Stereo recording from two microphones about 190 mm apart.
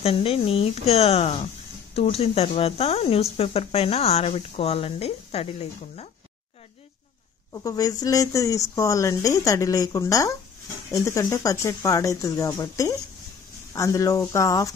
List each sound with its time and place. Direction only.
0.0 s speech: 30° left (ahead or behind)
7.5 s speech: 20° left (ahead or behind)